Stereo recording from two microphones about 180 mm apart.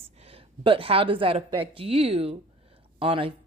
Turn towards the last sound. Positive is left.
turn(degrees=-30)  # may be behind; listen again after turning